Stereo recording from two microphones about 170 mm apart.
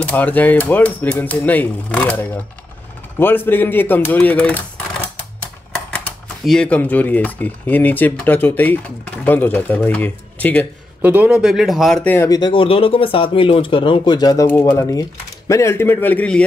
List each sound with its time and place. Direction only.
0.0 s speech: 10° left (ahead or behind)
5.9 s speech: 5° left (ahead or behind)
11.0 s speech: 10° right (ahead or behind); by 12.3 s 10° left (ahead or behind)
12.3 s speech: 25° left (ahead or behind); by 16.4 s 10° left (ahead or behind)